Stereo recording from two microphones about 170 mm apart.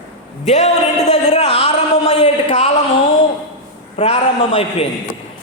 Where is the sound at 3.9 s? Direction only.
35° left (ahead or behind).